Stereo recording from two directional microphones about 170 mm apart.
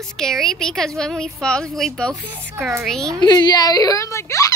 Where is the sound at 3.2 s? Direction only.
25° left (ahead or behind).